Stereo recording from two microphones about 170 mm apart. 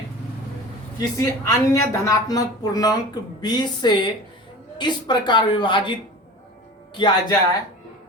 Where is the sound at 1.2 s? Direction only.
20° left (ahead or behind).